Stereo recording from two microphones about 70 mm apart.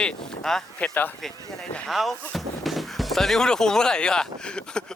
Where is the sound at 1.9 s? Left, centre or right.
Centre.